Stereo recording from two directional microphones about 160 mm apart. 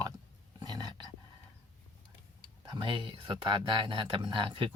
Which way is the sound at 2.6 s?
30° right (ahead or behind).